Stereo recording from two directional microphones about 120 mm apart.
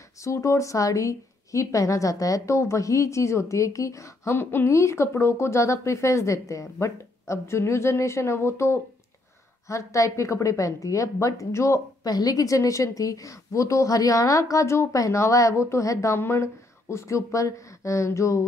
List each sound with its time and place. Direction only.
0.2 s a woman's voice: 25° left (ahead or behind)